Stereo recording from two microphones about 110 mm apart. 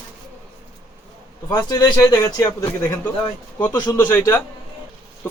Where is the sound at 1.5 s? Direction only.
35° left (ahead or behind).